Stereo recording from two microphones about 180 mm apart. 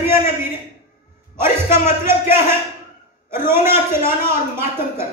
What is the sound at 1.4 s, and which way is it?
A man's voice, 15° right (ahead or behind).